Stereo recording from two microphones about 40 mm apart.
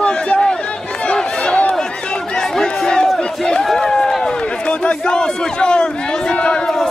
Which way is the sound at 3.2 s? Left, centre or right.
Centre.